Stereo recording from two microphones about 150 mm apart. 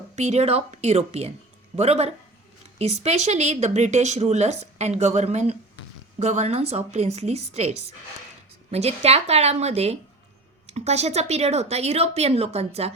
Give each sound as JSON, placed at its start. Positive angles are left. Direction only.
{"t": 0.2, "sound": "speech", "side_deg": -45}